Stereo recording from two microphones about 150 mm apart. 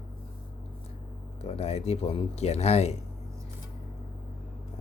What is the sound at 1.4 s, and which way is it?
Speech, 45° left (ahead or behind).